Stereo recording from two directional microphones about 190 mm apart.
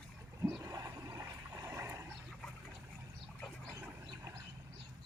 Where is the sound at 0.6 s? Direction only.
15° right (ahead or behind).